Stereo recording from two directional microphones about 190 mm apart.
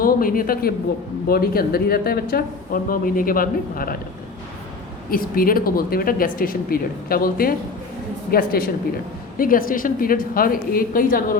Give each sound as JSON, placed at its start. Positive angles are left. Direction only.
{"t": 0.0, "sound": "speech", "side_deg": 50}
{"t": 5.1, "sound": "speech", "side_deg": 50}